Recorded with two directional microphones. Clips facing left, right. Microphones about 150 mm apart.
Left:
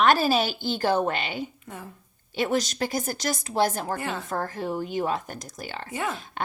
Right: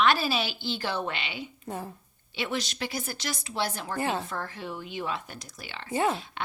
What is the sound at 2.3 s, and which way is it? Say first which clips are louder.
Speech: left 7 dB; 45° left (ahead or behind).